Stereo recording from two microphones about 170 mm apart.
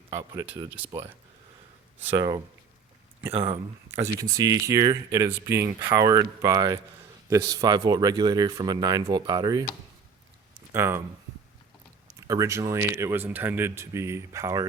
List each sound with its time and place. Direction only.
0.1 s speech: 15° right (ahead or behind)
3.8 s speech: 15° right (ahead or behind)
10.7 s speech: 15° right (ahead or behind)
12.0 s speech: 20° right (ahead or behind)